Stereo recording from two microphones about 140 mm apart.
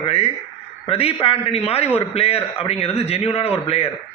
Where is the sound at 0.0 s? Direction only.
45° left (ahead or behind).